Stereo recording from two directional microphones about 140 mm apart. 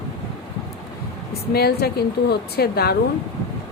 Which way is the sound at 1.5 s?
90° left.